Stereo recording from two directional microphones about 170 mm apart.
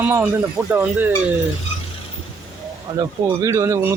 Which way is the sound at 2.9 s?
15° right (ahead or behind).